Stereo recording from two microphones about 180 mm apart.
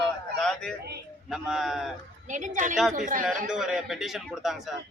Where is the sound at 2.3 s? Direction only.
45° right (ahead or behind).